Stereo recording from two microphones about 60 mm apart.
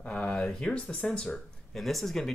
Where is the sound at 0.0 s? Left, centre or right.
Centre.